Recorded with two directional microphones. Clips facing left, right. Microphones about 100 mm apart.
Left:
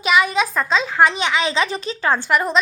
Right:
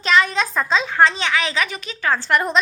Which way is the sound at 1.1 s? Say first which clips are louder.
Left 2 dB; 15° left (ahead or behind).